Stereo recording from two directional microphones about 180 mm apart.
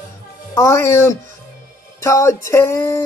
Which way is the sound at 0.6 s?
15° left (ahead or behind).